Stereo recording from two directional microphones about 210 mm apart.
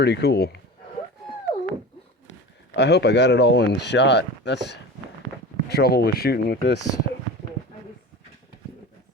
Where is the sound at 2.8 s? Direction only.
55° left (ahead or behind).